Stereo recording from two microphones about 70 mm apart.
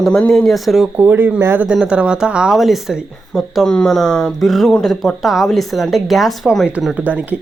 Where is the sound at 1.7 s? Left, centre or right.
Centre.